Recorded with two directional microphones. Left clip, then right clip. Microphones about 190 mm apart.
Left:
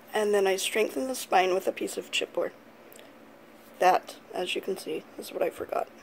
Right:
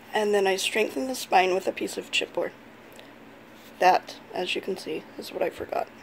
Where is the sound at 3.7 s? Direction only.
10° left (ahead or behind).